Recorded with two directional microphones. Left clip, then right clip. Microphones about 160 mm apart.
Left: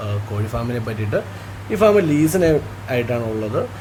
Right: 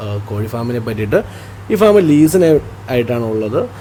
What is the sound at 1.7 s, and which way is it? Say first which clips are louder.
Speech: right 5 dB; 30° right (ahead or behind).